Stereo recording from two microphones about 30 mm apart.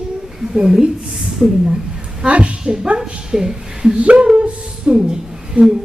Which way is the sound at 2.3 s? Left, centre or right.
Right.